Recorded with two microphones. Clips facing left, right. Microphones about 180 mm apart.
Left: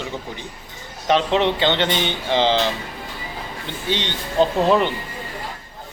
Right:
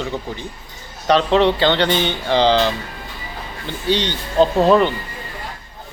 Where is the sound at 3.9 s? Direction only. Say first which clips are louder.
Right 5 dB; 20° left (ahead or behind).